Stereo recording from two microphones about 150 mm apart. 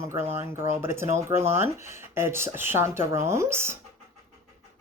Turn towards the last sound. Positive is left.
turn(degrees=-15)  # may be behind; listen again after turning